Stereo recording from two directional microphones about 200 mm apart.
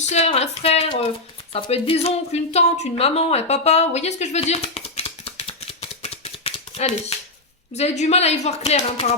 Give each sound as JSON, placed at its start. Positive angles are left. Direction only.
{"t": 0.0, "sound": "a woman's voice", "side_deg": 30}
{"t": 6.0, "sound": "a sound", "side_deg": 30}
{"t": 7.7, "sound": "a woman's voice", "side_deg": 35}